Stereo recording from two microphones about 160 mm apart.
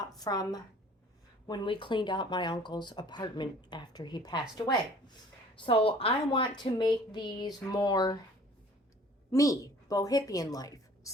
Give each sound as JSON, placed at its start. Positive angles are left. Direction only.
{"t": 0.0, "sound": "a woman's voice", "side_deg": 25}
{"t": 9.3, "sound": "a woman's voice", "side_deg": 20}